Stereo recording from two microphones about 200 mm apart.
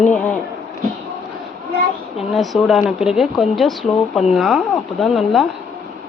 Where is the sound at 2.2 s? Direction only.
Centre (ahead or behind).